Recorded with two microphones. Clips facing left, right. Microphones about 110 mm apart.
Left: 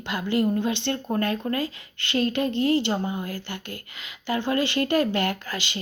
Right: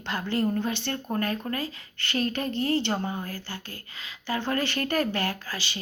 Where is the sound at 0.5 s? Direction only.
20° left (ahead or behind).